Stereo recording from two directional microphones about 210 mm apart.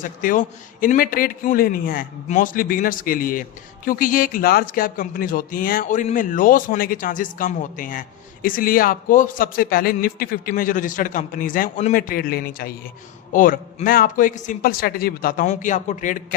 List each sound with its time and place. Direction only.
0.0 s speech: 40° left (ahead or behind)